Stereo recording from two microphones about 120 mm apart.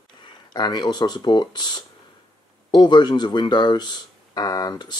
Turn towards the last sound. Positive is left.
turn(degrees=35)  # may be behind; listen again after turning